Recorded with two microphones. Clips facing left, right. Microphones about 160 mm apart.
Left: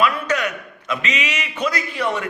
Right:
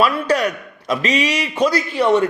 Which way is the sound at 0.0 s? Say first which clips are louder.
Right 3 dB; 35° right (ahead or behind).